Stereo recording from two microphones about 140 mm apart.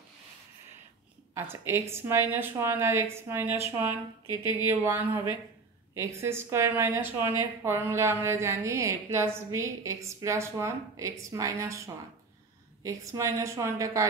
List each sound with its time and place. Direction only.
1.3 s a woman's voice: 20° right (ahead or behind)